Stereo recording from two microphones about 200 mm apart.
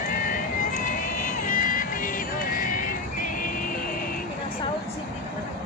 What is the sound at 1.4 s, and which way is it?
Vehicle, 45° left (ahead or behind).